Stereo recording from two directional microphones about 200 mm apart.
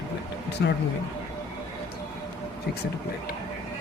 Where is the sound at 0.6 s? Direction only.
60° left (ahead or behind).